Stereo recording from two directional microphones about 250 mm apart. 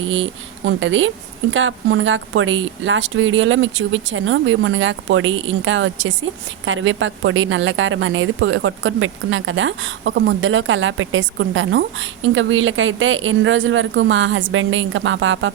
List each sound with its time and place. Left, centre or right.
0.0 s a woman's voice: right